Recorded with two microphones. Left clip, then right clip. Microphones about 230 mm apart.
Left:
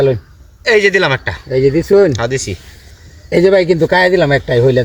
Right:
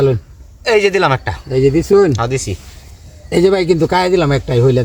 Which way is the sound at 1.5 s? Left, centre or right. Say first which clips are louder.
Left 1 dB; centre.